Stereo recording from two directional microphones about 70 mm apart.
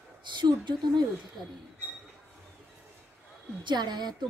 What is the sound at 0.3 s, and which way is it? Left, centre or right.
Speech, right.